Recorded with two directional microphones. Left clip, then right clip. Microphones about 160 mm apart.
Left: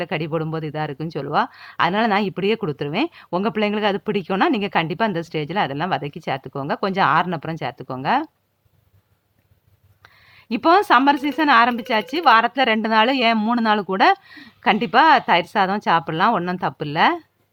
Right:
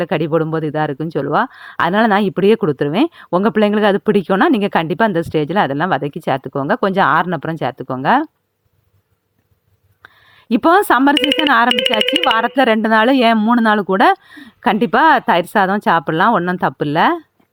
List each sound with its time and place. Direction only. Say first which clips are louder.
0.0 s speech: right 8 dB; 30° right (ahead or behind)
10.0 s speech: right 5 dB; 25° right (ahead or behind)